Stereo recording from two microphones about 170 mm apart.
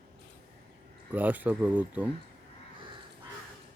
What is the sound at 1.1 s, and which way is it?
Speech, 10° right (ahead or behind).